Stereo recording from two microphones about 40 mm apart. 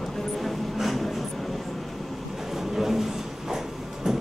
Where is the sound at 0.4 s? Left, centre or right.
Centre.